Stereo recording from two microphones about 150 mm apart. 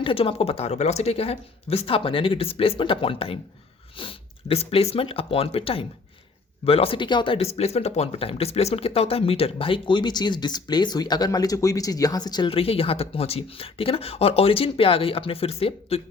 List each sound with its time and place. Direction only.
0.0 s speech: 35° left (ahead or behind)